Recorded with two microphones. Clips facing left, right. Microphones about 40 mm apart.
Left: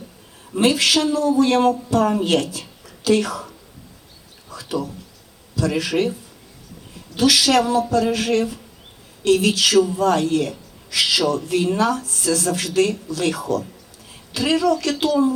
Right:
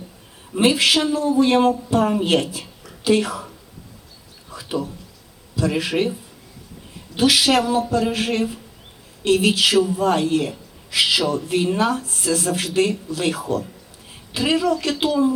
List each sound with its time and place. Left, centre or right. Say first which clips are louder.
0.5 s a woman's voice: even; right
4.4 s a sound: even; right
5.5 s a woman's voice: even; right
7.2 s a woman's voice: left 1 dB; right